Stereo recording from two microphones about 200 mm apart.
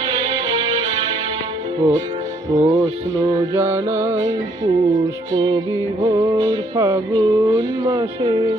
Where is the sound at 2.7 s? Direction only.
20° right (ahead or behind).